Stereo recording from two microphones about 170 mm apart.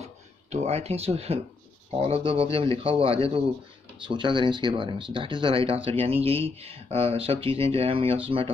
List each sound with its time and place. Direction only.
0.0 s speech: 40° right (ahead or behind)